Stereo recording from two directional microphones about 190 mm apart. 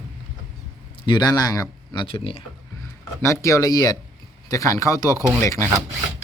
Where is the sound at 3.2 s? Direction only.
15° left (ahead or behind).